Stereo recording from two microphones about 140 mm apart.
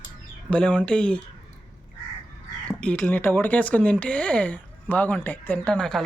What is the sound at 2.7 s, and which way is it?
Speech, 10° left (ahead or behind).